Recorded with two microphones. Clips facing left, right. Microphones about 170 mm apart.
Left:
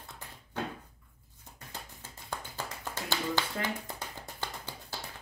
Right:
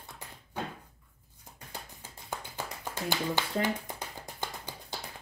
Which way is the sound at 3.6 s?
15° right (ahead or behind).